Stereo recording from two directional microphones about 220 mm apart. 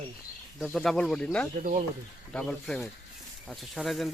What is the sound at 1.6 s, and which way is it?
Speech, 35° right (ahead or behind).